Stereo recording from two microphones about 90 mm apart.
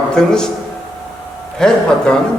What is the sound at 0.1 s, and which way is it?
Speech, 5° left (ahead or behind).